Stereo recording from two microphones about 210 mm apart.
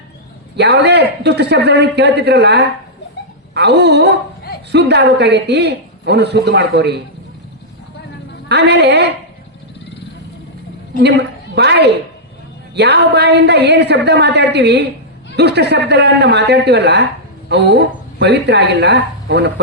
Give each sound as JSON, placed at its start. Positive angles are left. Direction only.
{"t": 0.5, "sound": "a man's voice", "side_deg": -55}
{"t": 8.4, "sound": "a man's voice", "side_deg": -50}
{"t": 11.0, "sound": "a woman's voice", "side_deg": -55}